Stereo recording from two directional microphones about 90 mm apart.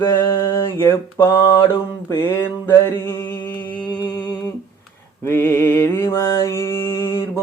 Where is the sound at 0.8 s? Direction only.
30° left (ahead or behind).